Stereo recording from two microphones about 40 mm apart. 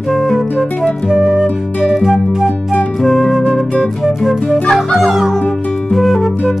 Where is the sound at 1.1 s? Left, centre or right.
Centre.